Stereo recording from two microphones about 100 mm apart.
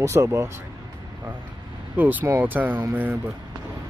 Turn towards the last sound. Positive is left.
turn(degrees=-20)  # may be behind; listen again after turning